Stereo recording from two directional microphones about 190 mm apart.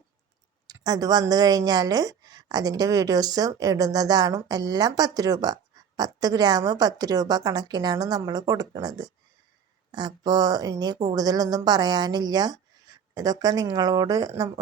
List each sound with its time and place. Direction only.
0.7 s a woman's voice: 20° right (ahead or behind)
10.2 s a woman's voice: 20° right (ahead or behind)